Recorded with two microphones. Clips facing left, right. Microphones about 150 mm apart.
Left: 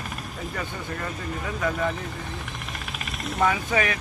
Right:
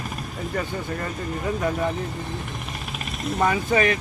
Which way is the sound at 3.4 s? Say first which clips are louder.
Right 2 dB; 35° right (ahead or behind).